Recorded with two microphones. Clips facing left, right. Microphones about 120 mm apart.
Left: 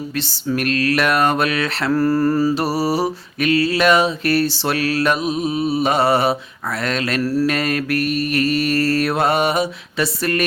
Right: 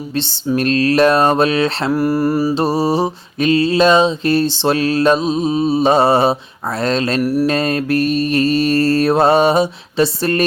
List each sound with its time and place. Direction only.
0.2 s mantra: 25° right (ahead or behind)
1.9 s mantra: 15° right (ahead or behind)
2.6 s mantra: 25° right (ahead or behind)
7.2 s mantra: 15° right (ahead or behind)
7.4 s mantra: 30° right (ahead or behind)